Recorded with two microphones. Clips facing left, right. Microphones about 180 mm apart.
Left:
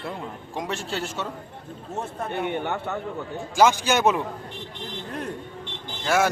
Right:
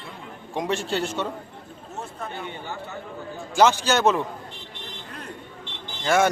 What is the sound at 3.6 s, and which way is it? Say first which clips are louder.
Speech: even; 10° left (ahead or behind).